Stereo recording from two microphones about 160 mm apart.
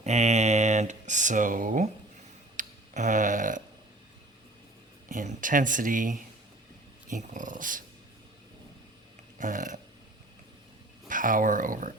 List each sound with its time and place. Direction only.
0.0 s speech: 45° right (ahead or behind)
2.6 s a sound: 50° right (ahead or behind)
5.0 s speech: 50° right (ahead or behind)
9.4 s speech: 55° right (ahead or behind)
11.1 s speech: 55° right (ahead or behind)